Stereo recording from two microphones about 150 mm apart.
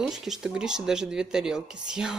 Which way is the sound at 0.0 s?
Centre (ahead or behind).